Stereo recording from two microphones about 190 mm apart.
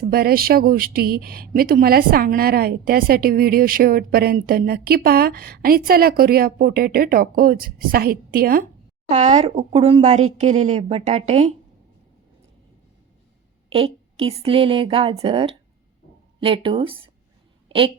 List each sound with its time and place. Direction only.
0.0 s speech: 55° right (ahead or behind)
9.0 s speech: 35° right (ahead or behind)
13.7 s a woman's voice: 30° right (ahead or behind)
17.7 s a sound: 30° right (ahead or behind)